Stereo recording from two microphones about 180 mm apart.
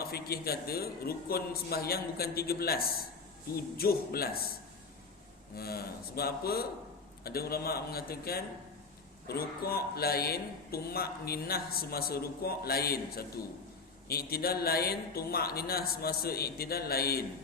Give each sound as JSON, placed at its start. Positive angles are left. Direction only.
{"t": 0.0, "sound": "speech", "side_deg": 60}
{"t": 5.5, "sound": "speech", "side_deg": 60}